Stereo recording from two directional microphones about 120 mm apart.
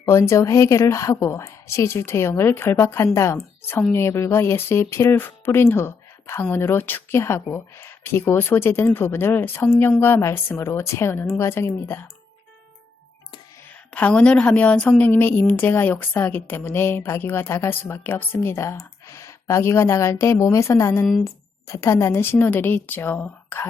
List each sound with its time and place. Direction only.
0.0 s a woman's voice: 25° left (ahead or behind)
13.9 s a woman's voice: 10° left (ahead or behind)